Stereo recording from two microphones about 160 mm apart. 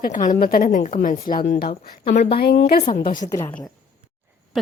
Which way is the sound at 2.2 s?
85° left.